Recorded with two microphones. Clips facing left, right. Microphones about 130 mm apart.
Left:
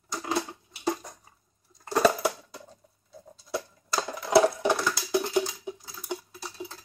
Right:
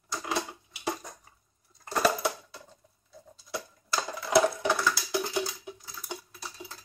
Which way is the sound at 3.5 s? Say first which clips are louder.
Left 3 dB; 25° left (ahead or behind).